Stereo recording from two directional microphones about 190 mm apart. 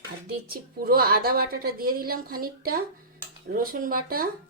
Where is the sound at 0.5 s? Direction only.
50° right (ahead or behind).